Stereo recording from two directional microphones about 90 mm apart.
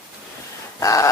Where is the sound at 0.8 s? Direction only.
40° left (ahead or behind).